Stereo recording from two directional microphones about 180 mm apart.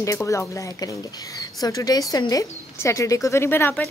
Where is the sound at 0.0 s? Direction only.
15° left (ahead or behind).